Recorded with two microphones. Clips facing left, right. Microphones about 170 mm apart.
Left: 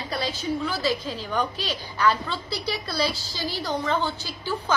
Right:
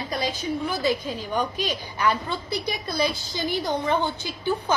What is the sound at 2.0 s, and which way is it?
A woman's voice, 20° right (ahead or behind).